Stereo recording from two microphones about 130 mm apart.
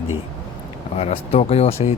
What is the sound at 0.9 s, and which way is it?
Speech, 50° left (ahead or behind).